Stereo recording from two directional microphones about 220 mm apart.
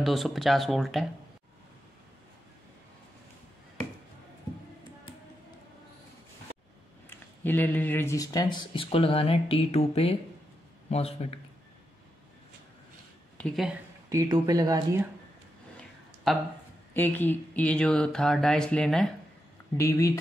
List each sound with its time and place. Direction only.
0.0 s speech: centre (ahead or behind)
7.4 s speech: 10° left (ahead or behind); by 11.3 s 25° left (ahead or behind)
13.4 s speech: centre (ahead or behind)
14.0 s speech: 15° right (ahead or behind)
16.3 s speech: centre (ahead or behind)
19.8 s speech: 15° left (ahead or behind)